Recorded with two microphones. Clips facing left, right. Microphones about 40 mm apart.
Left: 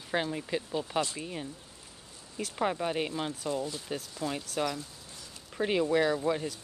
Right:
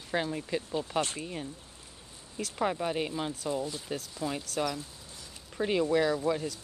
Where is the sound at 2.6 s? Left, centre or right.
Centre.